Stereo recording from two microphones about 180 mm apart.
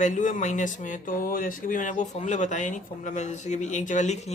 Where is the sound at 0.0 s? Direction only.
45° left (ahead or behind).